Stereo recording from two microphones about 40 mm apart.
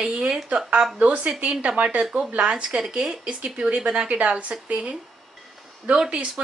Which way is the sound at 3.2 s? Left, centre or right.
Right.